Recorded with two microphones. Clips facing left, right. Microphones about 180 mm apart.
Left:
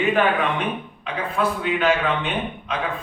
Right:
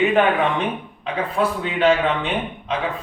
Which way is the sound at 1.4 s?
30° right (ahead or behind).